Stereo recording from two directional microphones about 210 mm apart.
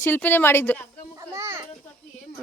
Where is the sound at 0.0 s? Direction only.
10° left (ahead or behind).